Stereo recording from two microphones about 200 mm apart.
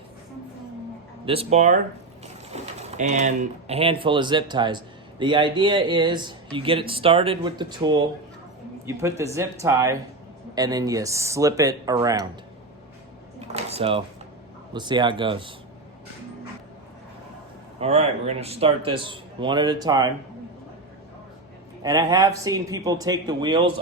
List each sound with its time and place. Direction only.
1.2 s a man's voice: 30° right (ahead or behind)
13.5 s a sound: 30° right (ahead or behind)
14.7 s speech: 20° right (ahead or behind)
17.7 s speech: 30° right (ahead or behind)
21.8 s a man's voice: 20° right (ahead or behind)